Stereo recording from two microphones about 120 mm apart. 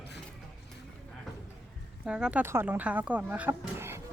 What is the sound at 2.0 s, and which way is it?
Speech, 10° right (ahead or behind).